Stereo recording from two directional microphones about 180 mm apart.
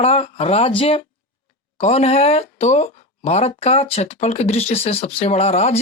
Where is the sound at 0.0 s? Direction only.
35° left (ahead or behind).